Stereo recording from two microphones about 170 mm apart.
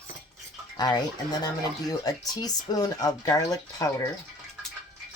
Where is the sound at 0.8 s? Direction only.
25° left (ahead or behind).